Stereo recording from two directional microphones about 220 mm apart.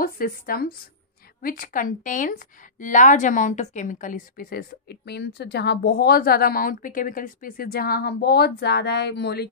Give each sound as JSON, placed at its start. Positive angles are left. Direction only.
{"t": 0.0, "sound": "a woman's voice", "side_deg": 40}